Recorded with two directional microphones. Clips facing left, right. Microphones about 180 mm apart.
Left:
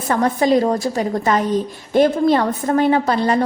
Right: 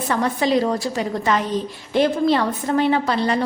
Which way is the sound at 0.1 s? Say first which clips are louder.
Left 4 dB; 45° left (ahead or behind).